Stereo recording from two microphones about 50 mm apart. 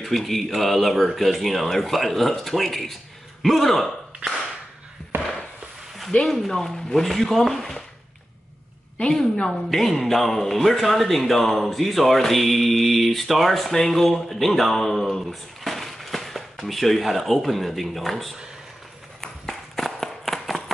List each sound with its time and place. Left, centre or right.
0.0 s a woman's voice: centre
5.1 s chop: right
6.2 s a woman's voice: centre
9.0 s a woman's voice: centre
19.2 s a sound: centre